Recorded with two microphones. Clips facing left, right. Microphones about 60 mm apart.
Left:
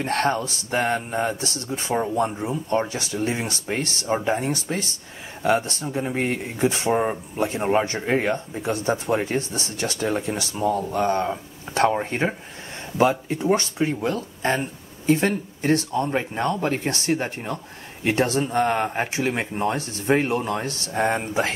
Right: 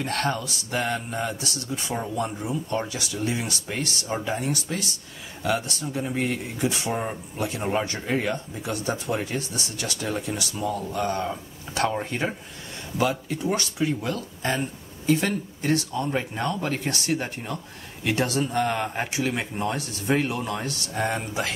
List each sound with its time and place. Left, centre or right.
0.0 s speech: left